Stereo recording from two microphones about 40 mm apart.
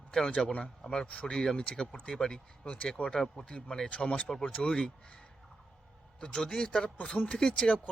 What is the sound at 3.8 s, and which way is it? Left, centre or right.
Speech, left.